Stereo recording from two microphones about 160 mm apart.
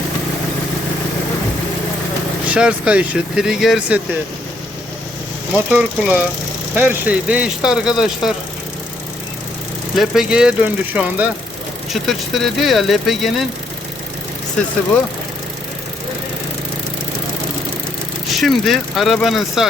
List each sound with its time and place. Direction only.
2.5 s speech: 5° right (ahead or behind)
5.5 s speech: 10° right (ahead or behind)
9.9 s speech: centre (ahead or behind)
18.3 s speech: centre (ahead or behind)